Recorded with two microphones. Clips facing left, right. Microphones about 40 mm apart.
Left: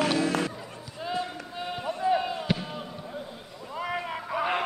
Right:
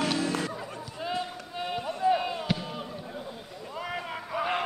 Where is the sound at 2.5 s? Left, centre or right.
Centre.